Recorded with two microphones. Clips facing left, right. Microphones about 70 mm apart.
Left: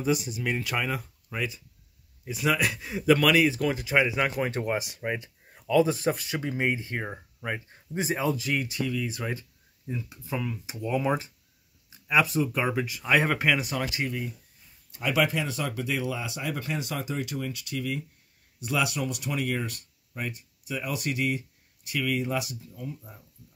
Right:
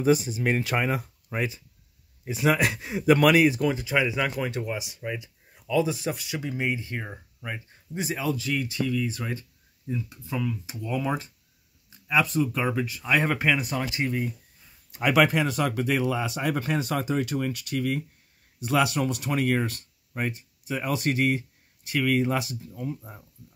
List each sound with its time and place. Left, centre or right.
0.0 s speech: right
3.9 s speech: left
4.4 s speech: left; by 13.7 s centre
13.9 s speech: right
15.0 s speech: right
15.8 s speech: right
17.4 s speech: right
18.9 s speech: right